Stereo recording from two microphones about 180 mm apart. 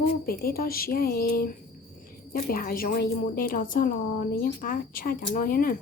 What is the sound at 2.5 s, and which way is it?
A woman's voice, 55° left (ahead or behind).